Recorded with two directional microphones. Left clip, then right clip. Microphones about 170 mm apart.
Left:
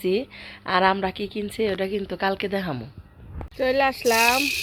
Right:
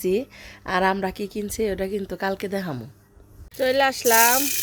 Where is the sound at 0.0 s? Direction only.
35° right (ahead or behind).